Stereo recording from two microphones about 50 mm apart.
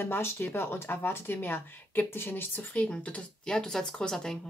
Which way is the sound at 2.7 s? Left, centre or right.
Left.